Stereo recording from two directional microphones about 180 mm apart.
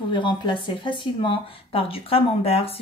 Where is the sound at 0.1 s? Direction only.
25° left (ahead or behind).